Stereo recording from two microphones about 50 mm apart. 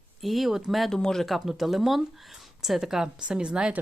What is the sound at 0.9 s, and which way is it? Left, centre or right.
Speech, centre.